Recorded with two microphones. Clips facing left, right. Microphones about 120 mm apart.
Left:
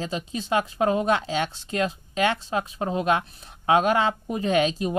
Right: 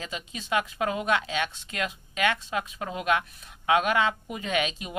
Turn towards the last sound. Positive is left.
turn(degrees=40)  # may be behind; listen again after turning